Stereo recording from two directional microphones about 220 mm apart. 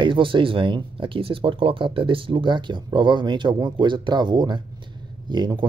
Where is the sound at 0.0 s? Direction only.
20° right (ahead or behind).